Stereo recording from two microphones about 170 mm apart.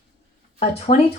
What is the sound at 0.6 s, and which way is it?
Speech, 40° left (ahead or behind).